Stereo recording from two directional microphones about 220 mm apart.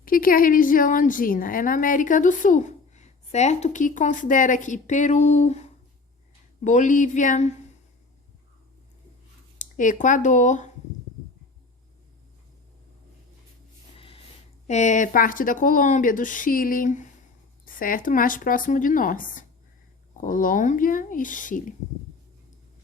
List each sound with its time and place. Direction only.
0.0 s a woman's voice: 40° left (ahead or behind)
9.6 s speech: 35° left (ahead or behind)
14.0 s snort: 25° left (ahead or behind)
14.7 s a woman's voice: 30° left (ahead or behind)